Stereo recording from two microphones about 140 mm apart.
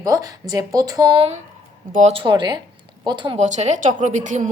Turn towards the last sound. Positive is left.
turn(degrees=-65)  # may be behind; listen again after turning